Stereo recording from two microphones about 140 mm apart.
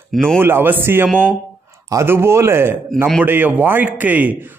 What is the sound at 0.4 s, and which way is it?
A man's voice, 15° right (ahead or behind).